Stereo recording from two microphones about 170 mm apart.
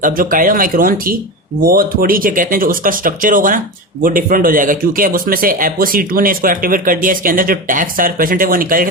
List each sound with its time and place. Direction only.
0.0 s speech: 55° right (ahead or behind)